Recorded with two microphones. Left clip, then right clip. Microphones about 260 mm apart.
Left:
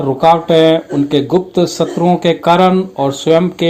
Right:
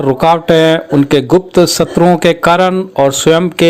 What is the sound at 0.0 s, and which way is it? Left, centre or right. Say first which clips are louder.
Speech: even; right.